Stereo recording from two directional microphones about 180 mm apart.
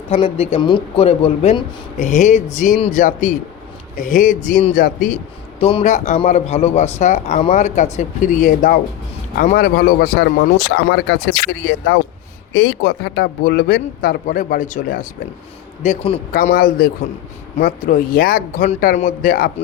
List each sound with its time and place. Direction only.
0.1 s a man's voice: 35° left (ahead or behind)
3.0 s speech: 45° left (ahead or behind)
5.5 s a man's voice: 35° left (ahead or behind); by 15.0 s 50° left (ahead or behind)
15.8 s a man's voice: 40° left (ahead or behind)
16.6 s speech: 50° left (ahead or behind)